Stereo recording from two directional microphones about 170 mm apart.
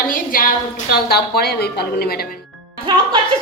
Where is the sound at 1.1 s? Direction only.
70° left (ahead or behind).